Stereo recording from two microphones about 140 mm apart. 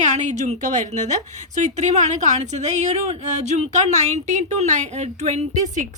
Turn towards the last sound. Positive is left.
turn(degrees=-55)  # may be behind; listen again after turning